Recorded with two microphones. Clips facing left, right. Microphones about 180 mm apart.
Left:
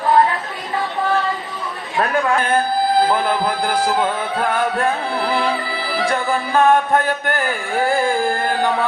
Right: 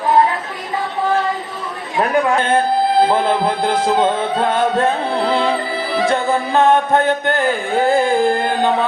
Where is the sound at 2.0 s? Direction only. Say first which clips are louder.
Right 2 dB; 20° right (ahead or behind).